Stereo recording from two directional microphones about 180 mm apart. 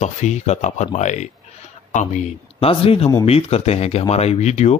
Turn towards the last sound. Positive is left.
turn(degrees=40)  # may be behind; listen again after turning